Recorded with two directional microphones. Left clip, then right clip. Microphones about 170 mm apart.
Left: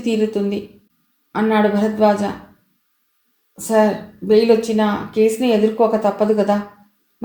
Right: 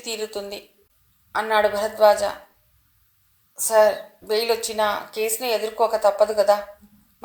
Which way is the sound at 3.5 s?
25° right (ahead or behind).